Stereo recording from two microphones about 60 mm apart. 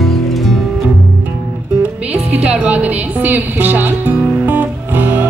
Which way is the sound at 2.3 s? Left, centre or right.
Right.